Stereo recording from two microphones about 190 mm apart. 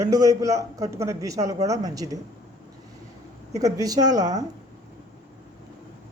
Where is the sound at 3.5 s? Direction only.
15° right (ahead or behind).